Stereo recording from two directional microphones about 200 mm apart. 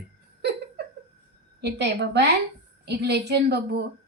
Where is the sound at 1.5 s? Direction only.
60° right (ahead or behind).